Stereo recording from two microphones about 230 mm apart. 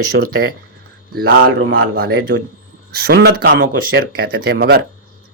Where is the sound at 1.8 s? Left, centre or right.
Right.